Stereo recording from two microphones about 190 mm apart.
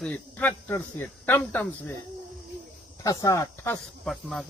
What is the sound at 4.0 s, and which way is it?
Speech, centre (ahead or behind).